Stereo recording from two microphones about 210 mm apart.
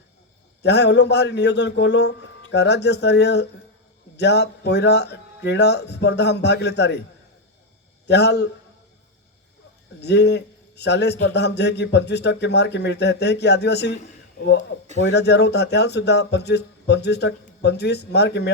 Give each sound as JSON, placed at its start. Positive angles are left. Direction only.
{"t": 0.6, "sound": "a man's voice", "side_deg": 55}
{"t": 8.0, "sound": "a man's voice", "side_deg": 55}
{"t": 10.0, "sound": "a man's voice", "side_deg": 55}